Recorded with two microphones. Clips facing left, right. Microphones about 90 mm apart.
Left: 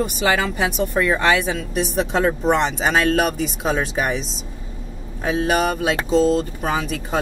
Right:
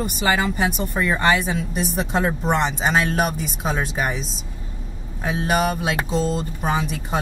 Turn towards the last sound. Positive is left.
turn(degrees=-5)  # may be behind; listen again after turning